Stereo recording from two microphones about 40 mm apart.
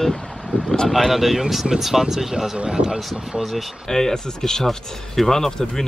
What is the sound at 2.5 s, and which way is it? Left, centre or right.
Speech, right.